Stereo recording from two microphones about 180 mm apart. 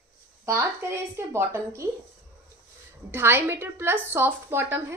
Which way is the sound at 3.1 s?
15° right (ahead or behind).